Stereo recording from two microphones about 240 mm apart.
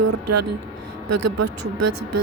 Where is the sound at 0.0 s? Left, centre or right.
Right.